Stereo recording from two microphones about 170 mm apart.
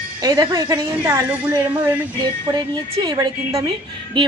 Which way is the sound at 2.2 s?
25° right (ahead or behind).